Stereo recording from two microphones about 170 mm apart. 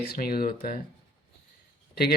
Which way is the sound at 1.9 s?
70° left (ahead or behind).